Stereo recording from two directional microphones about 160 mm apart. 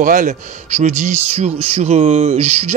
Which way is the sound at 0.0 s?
55° right (ahead or behind).